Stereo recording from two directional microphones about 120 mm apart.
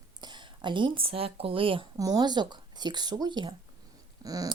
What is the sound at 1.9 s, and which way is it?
A woman's voice, 30° right (ahead or behind).